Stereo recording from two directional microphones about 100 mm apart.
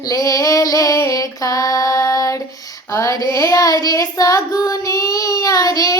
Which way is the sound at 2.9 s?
30° left (ahead or behind).